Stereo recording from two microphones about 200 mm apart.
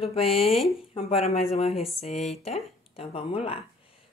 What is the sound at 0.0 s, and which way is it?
Speech, 30° left (ahead or behind).